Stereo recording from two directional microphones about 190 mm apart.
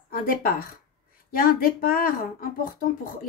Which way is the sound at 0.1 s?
50° left (ahead or behind).